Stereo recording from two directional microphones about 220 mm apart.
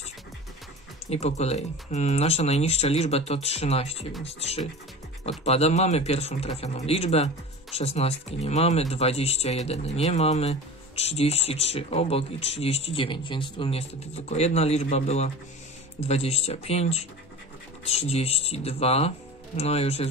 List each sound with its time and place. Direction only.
1.1 s speech: 30° left (ahead or behind)